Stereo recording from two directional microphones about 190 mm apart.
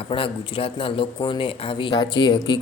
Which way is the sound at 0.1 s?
30° left (ahead or behind).